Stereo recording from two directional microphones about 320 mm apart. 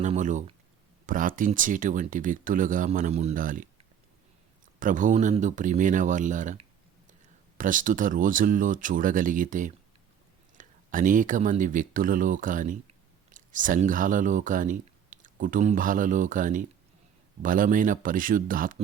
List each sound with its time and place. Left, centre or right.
0.0 s speech: right
4.8 s speech: right